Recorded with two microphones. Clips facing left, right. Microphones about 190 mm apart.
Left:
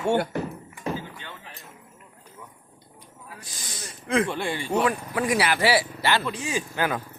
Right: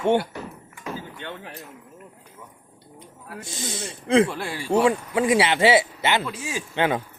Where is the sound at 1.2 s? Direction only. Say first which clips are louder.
Right 7 dB; 60° right (ahead or behind).